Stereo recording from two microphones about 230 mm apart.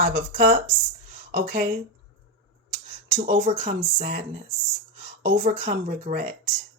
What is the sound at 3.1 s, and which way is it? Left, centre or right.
Speech, right.